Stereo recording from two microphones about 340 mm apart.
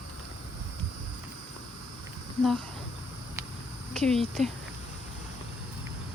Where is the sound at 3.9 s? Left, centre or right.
Centre.